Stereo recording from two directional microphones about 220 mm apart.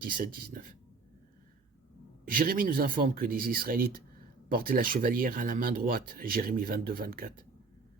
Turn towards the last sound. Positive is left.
turn(degrees=-40)  # may be behind; listen again after turning